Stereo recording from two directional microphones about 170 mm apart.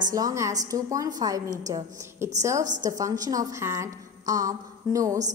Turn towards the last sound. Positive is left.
turn(degrees=-20)  # may be behind; listen again after turning